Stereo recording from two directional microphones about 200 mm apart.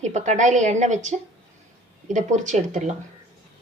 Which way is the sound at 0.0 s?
35° right (ahead or behind).